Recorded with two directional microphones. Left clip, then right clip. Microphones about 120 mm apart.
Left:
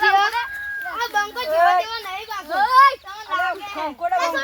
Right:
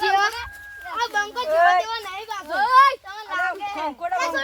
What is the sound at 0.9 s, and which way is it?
Speech, 20° right (ahead or behind).